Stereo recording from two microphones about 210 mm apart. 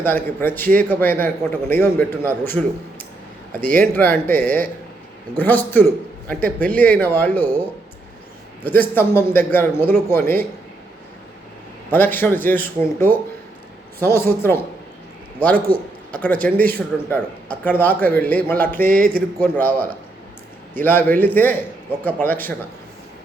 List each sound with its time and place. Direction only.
0.0 s a man's voice: 10° left (ahead or behind)
8.6 s a man's voice: 10° left (ahead or behind)
11.9 s a man's voice: 10° left (ahead or behind)
18.9 s speech: 40° right (ahead or behind)
19.4 s a man's voice: 10° left (ahead or behind)